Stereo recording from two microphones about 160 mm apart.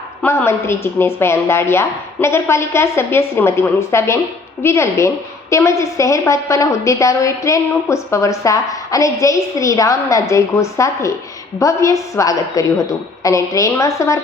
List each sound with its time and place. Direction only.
0.2 s a woman's voice: 15° left (ahead or behind)